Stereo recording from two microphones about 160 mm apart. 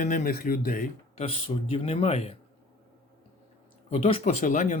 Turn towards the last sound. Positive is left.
turn(degrees=50)  # may be behind; listen again after turning